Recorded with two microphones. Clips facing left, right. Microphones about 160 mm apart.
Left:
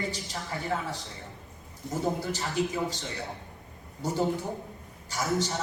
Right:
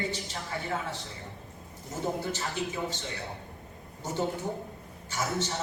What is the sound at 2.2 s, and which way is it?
Speech, 35° left (ahead or behind).